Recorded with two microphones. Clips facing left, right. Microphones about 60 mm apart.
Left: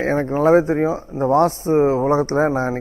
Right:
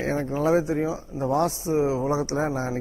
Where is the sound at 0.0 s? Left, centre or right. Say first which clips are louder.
Left 7 dB; left.